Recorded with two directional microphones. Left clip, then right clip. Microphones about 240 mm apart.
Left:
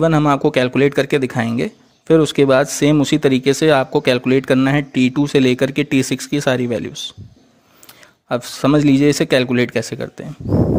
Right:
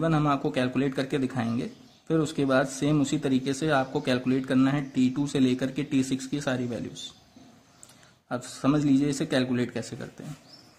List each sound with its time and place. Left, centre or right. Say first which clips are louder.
0.0 s speech: left 11 dB; left
8.3 s speech: left 11 dB; left